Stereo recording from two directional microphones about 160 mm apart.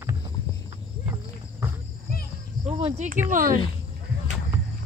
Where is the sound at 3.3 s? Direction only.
55° right (ahead or behind).